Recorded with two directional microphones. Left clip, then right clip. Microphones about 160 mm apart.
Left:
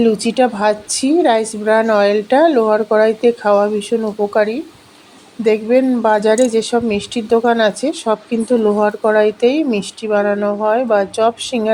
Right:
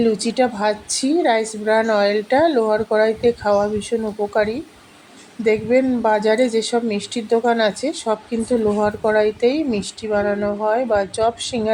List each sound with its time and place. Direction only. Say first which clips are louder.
0.0 s a woman's voice: left 4 dB; 20° left (ahead or behind)